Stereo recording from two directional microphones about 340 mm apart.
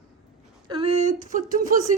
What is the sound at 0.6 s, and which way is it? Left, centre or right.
Speech, centre.